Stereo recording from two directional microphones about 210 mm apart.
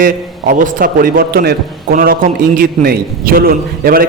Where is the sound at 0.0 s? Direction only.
40° right (ahead or behind).